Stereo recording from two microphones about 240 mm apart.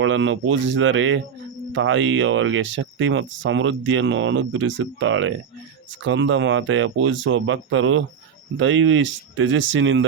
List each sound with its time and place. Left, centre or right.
0.0 s speech: right